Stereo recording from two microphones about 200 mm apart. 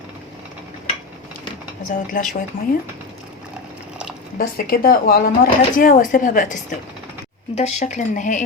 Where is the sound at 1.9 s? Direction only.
40° left (ahead or behind).